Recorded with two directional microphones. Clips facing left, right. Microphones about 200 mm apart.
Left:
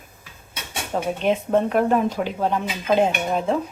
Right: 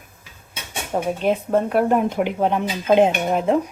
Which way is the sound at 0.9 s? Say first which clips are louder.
Right 1 dB; 10° right (ahead or behind).